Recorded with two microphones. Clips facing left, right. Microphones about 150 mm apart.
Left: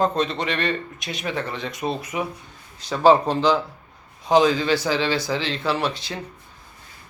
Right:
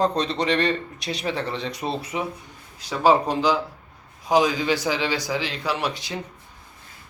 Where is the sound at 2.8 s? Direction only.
5° right (ahead or behind).